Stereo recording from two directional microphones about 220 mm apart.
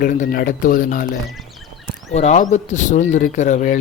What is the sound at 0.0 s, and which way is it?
A man's voice, 40° left (ahead or behind).